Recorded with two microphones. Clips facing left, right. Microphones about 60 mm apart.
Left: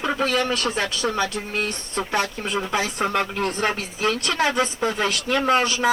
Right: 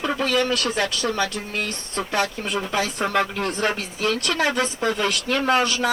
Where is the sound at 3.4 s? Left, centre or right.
Left.